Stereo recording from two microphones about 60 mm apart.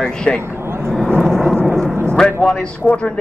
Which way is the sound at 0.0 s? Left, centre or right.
Centre.